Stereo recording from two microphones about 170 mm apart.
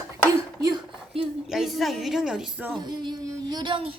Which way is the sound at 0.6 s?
20° right (ahead or behind).